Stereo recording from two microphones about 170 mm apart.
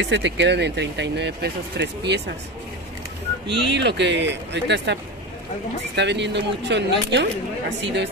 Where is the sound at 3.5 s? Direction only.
90° right.